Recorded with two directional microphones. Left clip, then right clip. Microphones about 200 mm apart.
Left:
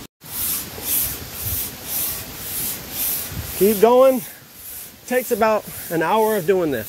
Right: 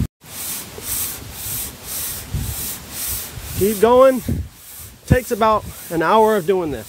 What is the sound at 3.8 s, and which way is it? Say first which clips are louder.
Speech: right 2 dB; 30° right (ahead or behind).